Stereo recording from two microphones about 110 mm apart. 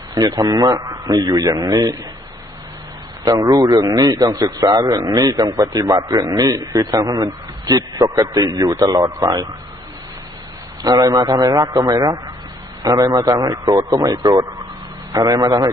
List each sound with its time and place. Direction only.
0.1 s a man's voice: 35° right (ahead or behind)
3.2 s a man's voice: 35° right (ahead or behind)
10.8 s a man's voice: 35° right (ahead or behind)